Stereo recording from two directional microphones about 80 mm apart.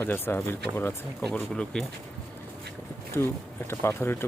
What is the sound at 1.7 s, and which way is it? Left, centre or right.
Speech, centre.